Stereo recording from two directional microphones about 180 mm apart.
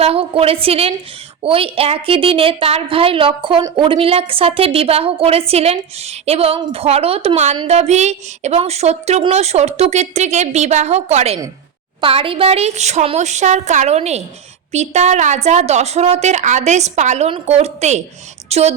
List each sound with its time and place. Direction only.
0.0 s a woman's voice: 35° right (ahead or behind)